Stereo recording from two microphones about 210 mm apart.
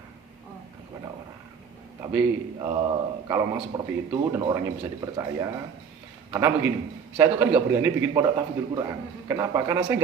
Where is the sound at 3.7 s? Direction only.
15° right (ahead or behind).